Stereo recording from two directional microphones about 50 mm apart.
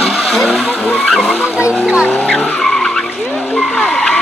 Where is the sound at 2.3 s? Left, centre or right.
Left.